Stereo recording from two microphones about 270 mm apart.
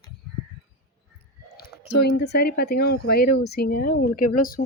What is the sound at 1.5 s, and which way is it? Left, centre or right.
Speech, left.